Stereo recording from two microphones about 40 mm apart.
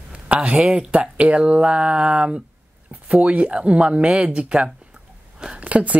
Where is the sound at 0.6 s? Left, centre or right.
Right.